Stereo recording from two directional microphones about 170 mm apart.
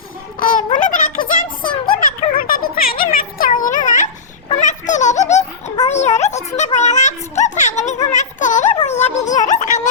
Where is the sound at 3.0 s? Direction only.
55° left (ahead or behind).